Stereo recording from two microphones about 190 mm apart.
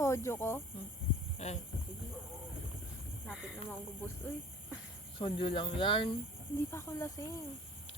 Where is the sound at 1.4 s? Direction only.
35° left (ahead or behind).